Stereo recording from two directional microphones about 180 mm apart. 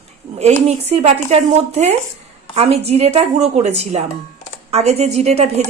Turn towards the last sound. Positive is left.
turn(degrees=-35)  # may be behind; listen again after turning